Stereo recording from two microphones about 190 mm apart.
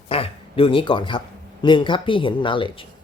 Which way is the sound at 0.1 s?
30° left (ahead or behind).